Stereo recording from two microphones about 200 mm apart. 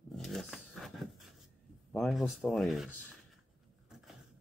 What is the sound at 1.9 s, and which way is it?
Speech, centre (ahead or behind).